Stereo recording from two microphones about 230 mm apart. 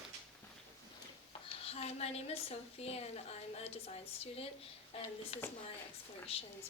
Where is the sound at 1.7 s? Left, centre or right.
Left.